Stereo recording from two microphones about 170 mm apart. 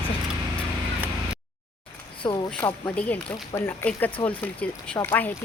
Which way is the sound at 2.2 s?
25° left (ahead or behind).